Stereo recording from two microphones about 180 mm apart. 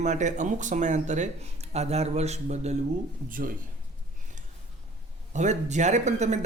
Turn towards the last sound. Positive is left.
turn(degrees=-40)  # may be behind; listen again after turning